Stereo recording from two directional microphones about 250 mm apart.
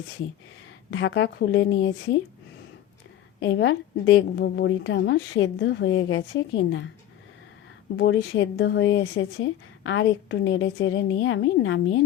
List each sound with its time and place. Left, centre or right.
0.9 s speech: left
3.4 s speech: left
7.9 s speech: left